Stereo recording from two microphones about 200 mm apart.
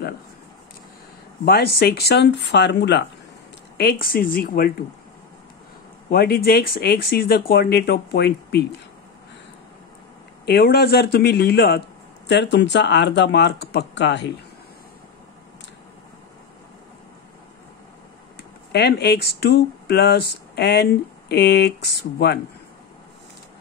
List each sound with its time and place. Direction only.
1.4 s speech: 50° left (ahead or behind)
3.7 s speech: 50° left (ahead or behind)
6.0 s speech: 50° left (ahead or behind)
10.4 s speech: 50° left (ahead or behind)
18.7 s speech: 55° left (ahead or behind)